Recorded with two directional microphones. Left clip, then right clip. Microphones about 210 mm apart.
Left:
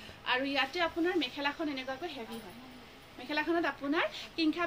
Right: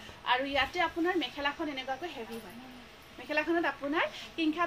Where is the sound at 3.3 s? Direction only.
15° left (ahead or behind).